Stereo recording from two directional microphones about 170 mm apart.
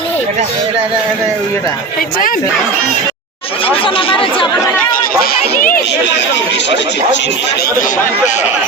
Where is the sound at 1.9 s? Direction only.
55° left (ahead or behind).